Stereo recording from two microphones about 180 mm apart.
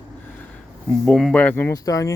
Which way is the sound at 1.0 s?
5° left (ahead or behind).